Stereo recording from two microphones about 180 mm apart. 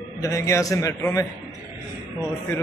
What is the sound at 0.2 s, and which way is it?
Speech, 15° left (ahead or behind).